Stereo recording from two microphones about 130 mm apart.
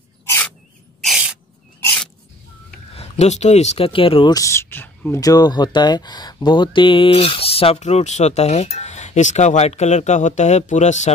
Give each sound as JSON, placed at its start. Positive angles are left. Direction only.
{"t": 0.2, "sound": "a sound", "side_deg": 20}
{"t": 1.0, "sound": "spray", "side_deg": -5}
{"t": 3.0, "sound": "speech", "side_deg": 60}
{"t": 4.3, "sound": "speech", "side_deg": 25}
{"t": 5.2, "sound": "speech", "side_deg": 30}